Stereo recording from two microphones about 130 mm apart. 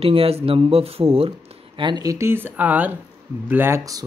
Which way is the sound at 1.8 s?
35° right (ahead or behind).